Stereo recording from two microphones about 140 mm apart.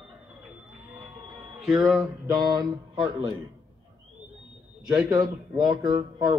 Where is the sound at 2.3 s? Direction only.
30° right (ahead or behind).